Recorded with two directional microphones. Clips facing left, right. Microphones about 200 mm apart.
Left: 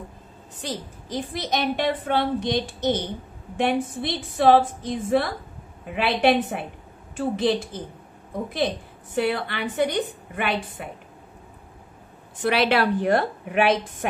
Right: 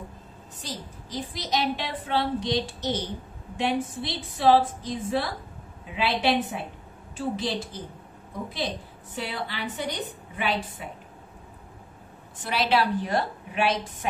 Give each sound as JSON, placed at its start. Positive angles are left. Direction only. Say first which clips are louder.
{"t": 0.6, "sound": "a woman's voice", "louder": "left 6 dB", "side_deg": 60}
{"t": 9.1, "sound": "a woman's voice", "louder": "left 9 dB", "side_deg": 60}
{"t": 12.4, "sound": "a woman's voice", "louder": "left 4 dB", "side_deg": 60}